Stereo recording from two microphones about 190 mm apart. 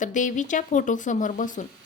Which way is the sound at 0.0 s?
40° left (ahead or behind).